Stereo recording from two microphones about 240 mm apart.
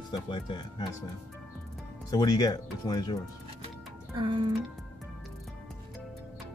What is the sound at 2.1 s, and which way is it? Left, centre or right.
Speech, centre.